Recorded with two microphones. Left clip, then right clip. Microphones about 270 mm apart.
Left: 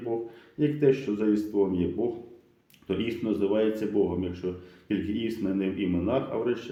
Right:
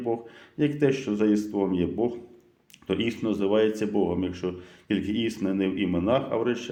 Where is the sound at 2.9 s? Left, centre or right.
Right.